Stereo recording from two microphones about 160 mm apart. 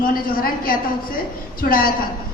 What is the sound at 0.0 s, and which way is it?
Speech, 65° left (ahead or behind).